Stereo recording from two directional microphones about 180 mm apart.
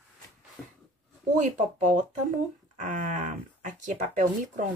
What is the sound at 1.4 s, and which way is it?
Speech, 40° right (ahead or behind).